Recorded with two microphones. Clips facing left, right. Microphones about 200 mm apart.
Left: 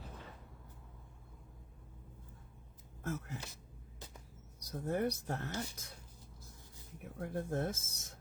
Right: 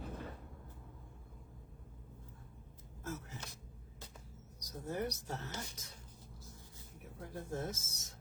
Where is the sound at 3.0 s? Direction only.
55° left (ahead or behind).